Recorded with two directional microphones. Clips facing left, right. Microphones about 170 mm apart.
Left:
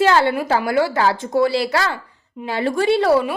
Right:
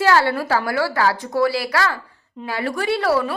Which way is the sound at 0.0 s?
20° left (ahead or behind).